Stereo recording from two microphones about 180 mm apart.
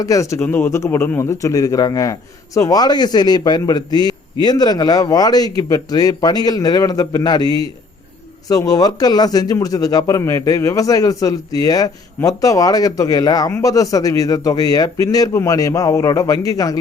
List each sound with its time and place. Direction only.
0.0 s a man's voice: 20° left (ahead or behind)